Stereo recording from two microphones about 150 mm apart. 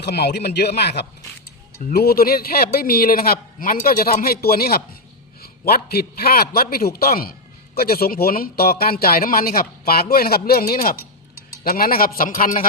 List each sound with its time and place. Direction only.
0.0 s a man's voice: 90° left; by 12.6 s 65° left (ahead or behind)